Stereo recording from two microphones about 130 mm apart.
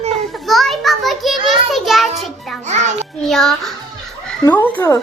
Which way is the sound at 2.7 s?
65° right (ahead or behind).